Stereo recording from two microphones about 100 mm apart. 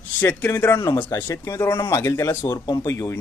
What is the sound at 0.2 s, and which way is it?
A man's voice, 25° left (ahead or behind).